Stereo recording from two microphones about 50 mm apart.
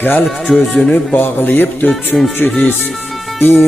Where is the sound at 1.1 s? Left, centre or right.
Left.